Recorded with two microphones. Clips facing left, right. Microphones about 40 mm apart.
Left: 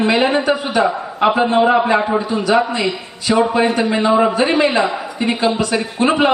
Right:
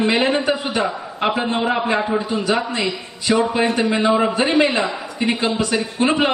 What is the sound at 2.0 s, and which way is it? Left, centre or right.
Speech, centre.